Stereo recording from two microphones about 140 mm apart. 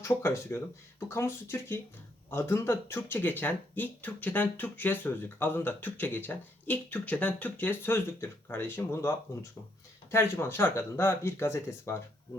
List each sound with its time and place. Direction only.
0.0 s speech: 20° left (ahead or behind)